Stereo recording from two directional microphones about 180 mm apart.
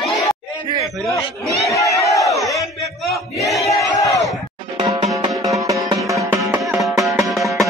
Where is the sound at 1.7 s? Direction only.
20° left (ahead or behind).